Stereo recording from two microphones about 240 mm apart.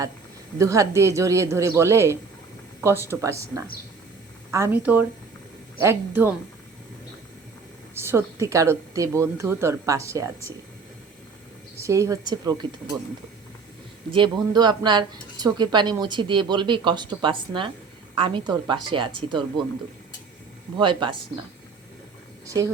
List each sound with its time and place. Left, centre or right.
0.6 s a woman's voice: centre
7.9 s a woman's voice: centre
11.8 s a woman's voice: centre
14.1 s speech: centre
20.7 s speech: centre